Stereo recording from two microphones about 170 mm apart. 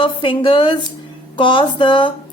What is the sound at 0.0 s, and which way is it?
A woman's voice, 30° left (ahead or behind).